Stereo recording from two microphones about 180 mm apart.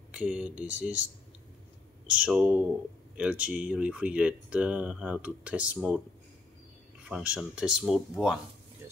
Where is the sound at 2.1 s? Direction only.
5° right (ahead or behind).